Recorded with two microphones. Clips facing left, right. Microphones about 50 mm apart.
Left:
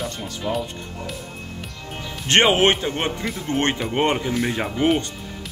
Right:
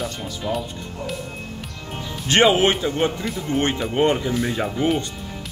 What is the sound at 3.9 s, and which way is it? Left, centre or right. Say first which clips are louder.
Speech: right 3 dB; left.